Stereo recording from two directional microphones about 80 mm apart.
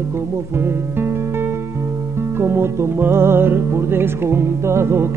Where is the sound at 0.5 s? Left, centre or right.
Right.